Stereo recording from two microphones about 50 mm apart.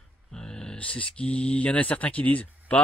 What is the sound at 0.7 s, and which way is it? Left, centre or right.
Speech, left.